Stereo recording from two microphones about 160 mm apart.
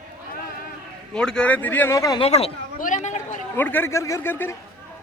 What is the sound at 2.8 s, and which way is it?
Speech, 50° left (ahead or behind).